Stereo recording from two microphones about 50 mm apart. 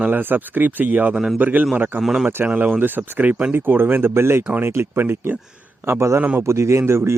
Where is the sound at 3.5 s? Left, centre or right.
Right.